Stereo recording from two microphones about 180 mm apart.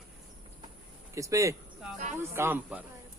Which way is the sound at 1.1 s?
15° right (ahead or behind).